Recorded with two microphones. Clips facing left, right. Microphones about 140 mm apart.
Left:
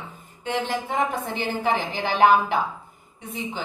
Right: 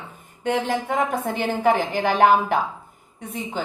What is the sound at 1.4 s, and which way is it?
A woman's voice, 45° right (ahead or behind).